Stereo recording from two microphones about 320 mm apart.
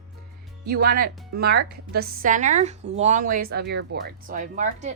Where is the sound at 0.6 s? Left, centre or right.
Right.